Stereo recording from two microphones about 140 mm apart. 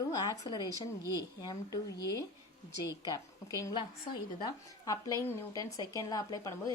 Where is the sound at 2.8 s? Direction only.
25° left (ahead or behind).